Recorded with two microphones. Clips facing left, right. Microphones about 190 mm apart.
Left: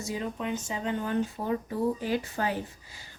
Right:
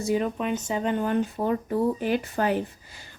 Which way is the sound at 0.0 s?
65° right (ahead or behind).